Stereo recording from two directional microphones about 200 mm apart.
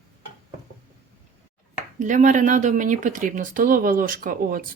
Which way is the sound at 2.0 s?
40° right (ahead or behind).